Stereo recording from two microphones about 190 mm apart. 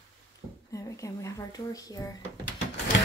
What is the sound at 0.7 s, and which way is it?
Speech, 15° left (ahead or behind).